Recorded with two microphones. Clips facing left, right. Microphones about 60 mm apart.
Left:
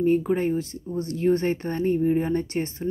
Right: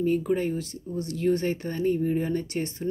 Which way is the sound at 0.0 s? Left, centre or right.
Left.